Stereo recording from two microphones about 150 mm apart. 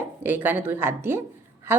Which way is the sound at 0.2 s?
15° right (ahead or behind).